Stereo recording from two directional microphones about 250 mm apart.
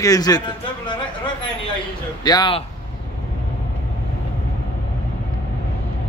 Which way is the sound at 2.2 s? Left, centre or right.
Centre.